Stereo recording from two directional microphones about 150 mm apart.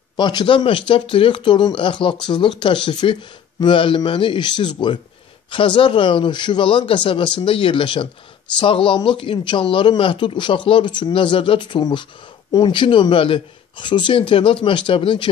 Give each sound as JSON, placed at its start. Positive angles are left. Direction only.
{"t": 0.1, "sound": "speech", "side_deg": 30}